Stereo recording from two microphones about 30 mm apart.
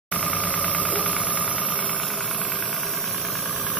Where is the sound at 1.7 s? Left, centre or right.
Left.